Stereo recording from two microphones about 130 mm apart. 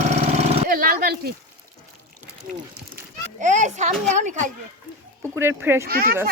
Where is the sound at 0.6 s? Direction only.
90° right.